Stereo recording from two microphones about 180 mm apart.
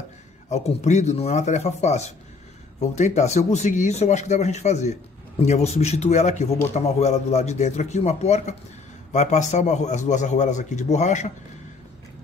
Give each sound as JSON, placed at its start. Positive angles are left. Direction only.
{"t": 0.5, "sound": "a man's voice", "side_deg": 40}